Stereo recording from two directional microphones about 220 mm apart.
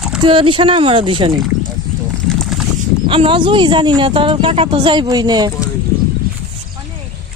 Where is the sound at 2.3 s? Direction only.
5° left (ahead or behind).